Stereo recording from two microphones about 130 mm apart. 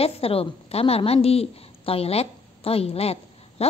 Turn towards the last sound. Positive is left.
turn(degrees=50)  # may be behind; listen again after turning